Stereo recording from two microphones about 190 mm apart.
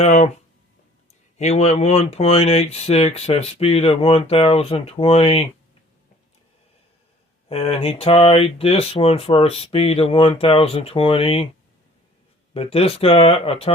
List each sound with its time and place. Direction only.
0.0 s speech: 35° left (ahead or behind)
1.4 s speech: 35° left (ahead or behind)
7.4 s speech: 30° left (ahead or behind)
12.5 s speech: 30° left (ahead or behind)